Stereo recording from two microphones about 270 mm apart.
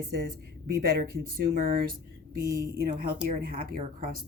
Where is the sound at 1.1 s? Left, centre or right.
Right.